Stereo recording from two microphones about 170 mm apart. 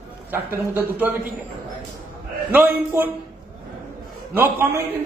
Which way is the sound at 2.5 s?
10° right (ahead or behind).